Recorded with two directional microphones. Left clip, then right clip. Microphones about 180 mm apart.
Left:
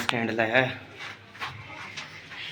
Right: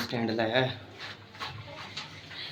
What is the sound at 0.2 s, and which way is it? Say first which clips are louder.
Speech: left 2 dB; 5° right (ahead or behind).